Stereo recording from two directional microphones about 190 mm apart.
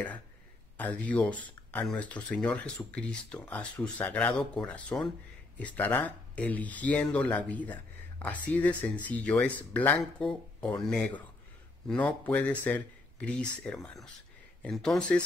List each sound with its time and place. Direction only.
0.7 s speech: 10° left (ahead or behind)